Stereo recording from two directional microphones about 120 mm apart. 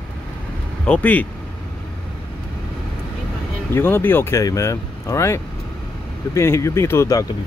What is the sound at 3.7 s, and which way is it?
Speech, 20° left (ahead or behind).